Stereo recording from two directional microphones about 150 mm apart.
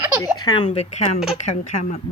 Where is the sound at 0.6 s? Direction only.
45° left (ahead or behind).